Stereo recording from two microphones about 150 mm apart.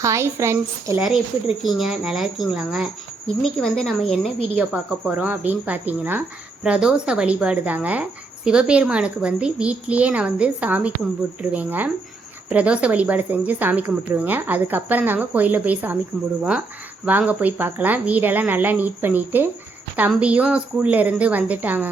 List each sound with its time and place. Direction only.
0.0 s speech: 20° right (ahead or behind)
1.6 s speech: centre (ahead or behind)